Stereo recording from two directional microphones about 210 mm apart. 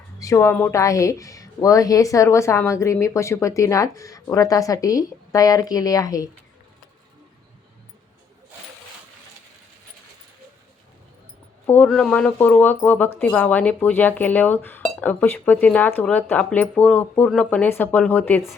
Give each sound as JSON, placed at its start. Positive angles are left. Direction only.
{"t": 0.2, "sound": "a woman's voice", "side_deg": 15}
{"t": 11.6, "sound": "a woman's voice", "side_deg": 10}